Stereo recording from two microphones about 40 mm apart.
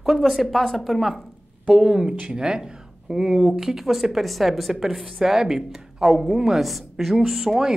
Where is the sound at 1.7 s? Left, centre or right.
Centre.